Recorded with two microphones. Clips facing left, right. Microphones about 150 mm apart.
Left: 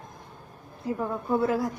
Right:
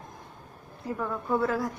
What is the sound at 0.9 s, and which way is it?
Speech, 25° left (ahead or behind).